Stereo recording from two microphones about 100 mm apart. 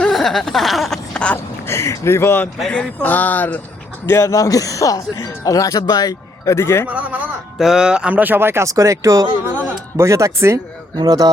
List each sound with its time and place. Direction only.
0.0 s speech: centre (ahead or behind)
1.6 s speech: 30° left (ahead or behind)
2.6 s speech: 10° left (ahead or behind)
4.0 s speech: 30° left (ahead or behind)
6.8 s a man's voice: 15° right (ahead or behind)
10.9 s speech: 40° right (ahead or behind)